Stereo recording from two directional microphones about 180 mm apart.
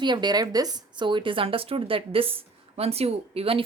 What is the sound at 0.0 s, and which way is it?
Speech, 25° right (ahead or behind).